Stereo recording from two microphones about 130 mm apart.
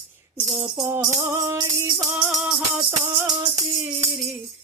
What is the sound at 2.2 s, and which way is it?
Music, 5° right (ahead or behind).